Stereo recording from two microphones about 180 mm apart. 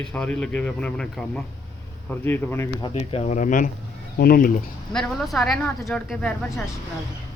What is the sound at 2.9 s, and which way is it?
Speech, 35° left (ahead or behind).